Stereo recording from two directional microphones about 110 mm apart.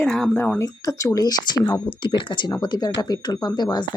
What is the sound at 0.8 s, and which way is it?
Speech, 35° left (ahead or behind).